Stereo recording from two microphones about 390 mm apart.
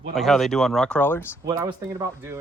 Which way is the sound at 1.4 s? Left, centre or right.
Centre.